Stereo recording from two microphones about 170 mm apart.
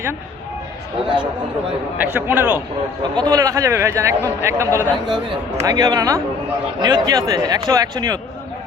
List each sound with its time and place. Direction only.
1.0 s speech: 30° right (ahead or behind)
2.0 s a man's voice: 10° right (ahead or behind)
3.0 s a man's voice: 25° right (ahead or behind)